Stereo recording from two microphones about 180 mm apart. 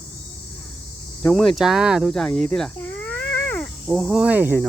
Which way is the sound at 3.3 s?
10° left (ahead or behind).